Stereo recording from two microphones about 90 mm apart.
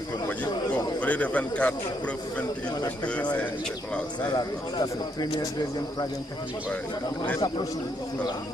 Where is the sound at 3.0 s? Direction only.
15° left (ahead or behind).